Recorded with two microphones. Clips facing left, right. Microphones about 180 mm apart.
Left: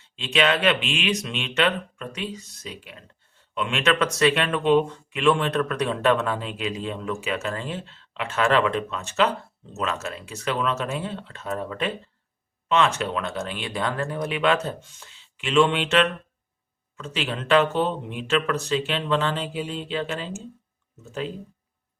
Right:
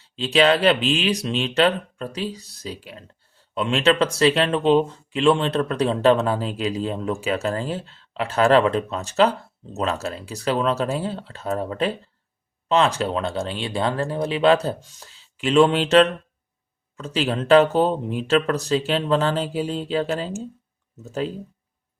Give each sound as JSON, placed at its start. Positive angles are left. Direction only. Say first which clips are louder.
{"t": 0.0, "sound": "speech", "louder": "right 5 dB", "side_deg": -35}